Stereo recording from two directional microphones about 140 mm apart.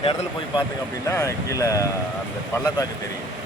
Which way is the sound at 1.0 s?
25° left (ahead or behind).